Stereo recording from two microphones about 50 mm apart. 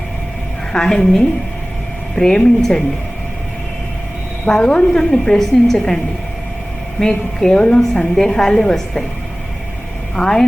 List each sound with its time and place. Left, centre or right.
0.7 s a woman's voice: centre
4.4 s a woman's voice: centre
7.0 s a woman's voice: centre
10.2 s a woman's voice: centre